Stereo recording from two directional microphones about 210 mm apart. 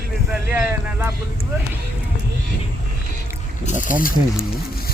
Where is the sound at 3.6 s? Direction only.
35° left (ahead or behind).